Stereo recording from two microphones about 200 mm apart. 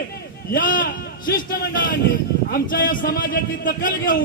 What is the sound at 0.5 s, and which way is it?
A man's voice, 45° left (ahead or behind).